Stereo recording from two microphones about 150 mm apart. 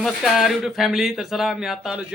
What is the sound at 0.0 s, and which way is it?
Speech, centre (ahead or behind).